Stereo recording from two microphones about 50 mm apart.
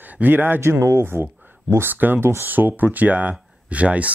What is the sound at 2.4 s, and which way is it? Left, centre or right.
Speech, right.